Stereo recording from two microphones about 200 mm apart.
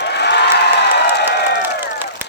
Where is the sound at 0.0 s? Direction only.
60° left (ahead or behind).